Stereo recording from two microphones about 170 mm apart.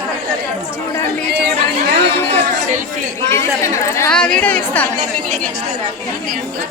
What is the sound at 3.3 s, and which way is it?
Speech, 15° left (ahead or behind).